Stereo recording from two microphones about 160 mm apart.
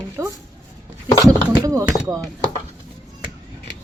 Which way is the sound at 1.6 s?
20° right (ahead or behind).